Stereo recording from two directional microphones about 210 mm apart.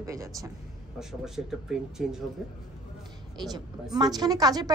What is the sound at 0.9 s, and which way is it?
Speech, centre (ahead or behind).